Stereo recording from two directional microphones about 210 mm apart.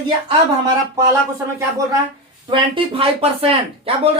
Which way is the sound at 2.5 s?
25° right (ahead or behind).